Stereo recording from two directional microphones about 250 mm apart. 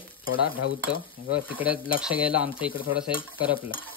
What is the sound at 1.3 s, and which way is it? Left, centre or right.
Speech, centre.